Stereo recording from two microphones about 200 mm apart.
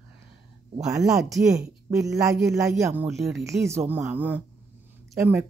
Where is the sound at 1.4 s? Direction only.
5° right (ahead or behind).